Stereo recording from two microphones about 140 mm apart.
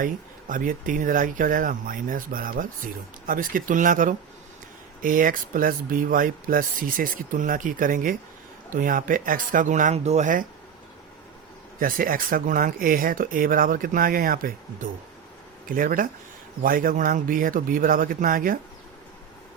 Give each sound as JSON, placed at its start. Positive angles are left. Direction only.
{"t": 0.0, "sound": "speech", "side_deg": -75}
{"t": 11.8, "sound": "speech", "side_deg": -90}